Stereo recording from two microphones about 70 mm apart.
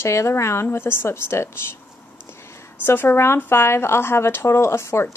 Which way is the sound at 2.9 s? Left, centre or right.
Left.